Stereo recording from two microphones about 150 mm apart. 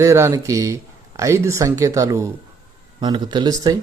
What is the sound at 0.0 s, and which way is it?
Speech, 20° right (ahead or behind).